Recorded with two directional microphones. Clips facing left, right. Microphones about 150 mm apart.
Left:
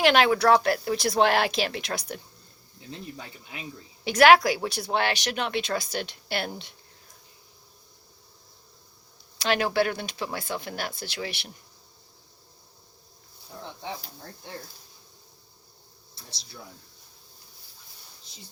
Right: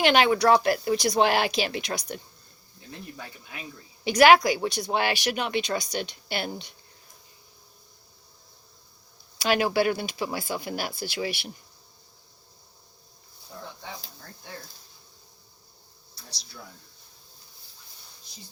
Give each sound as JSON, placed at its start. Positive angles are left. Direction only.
{"t": 0.0, "sound": "speech", "side_deg": 0}
{"t": 3.2, "sound": "speech", "side_deg": 20}
{"t": 4.0, "sound": "speech", "side_deg": 0}
{"t": 9.4, "sound": "speech", "side_deg": -5}